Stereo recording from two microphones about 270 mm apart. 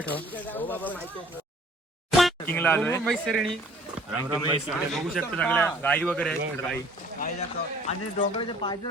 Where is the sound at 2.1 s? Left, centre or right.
Centre.